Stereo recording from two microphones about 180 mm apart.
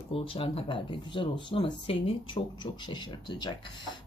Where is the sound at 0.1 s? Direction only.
30° left (ahead or behind).